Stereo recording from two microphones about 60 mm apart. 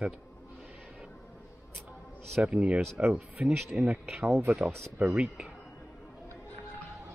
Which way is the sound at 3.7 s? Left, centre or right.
Right.